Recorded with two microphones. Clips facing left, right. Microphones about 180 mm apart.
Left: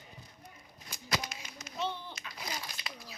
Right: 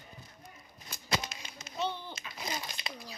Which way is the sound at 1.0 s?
25° right (ahead or behind).